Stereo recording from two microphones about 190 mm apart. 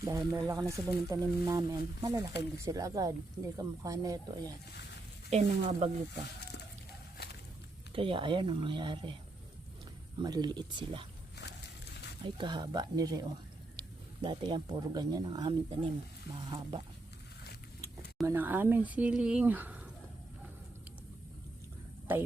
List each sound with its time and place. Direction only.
0.0 s speech: 20° right (ahead or behind)
5.3 s speech: 35° right (ahead or behind)
7.9 s speech: 25° right (ahead or behind)
10.2 s speech: 20° right (ahead or behind)
12.2 s speech: 25° right (ahead or behind)
18.3 s speech: 10° right (ahead or behind)
22.1 s speech: 10° right (ahead or behind)